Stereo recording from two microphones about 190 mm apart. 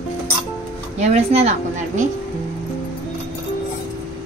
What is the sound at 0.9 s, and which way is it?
Speech, 35° right (ahead or behind).